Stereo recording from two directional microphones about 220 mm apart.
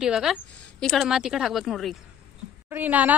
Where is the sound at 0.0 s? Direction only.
5° right (ahead or behind).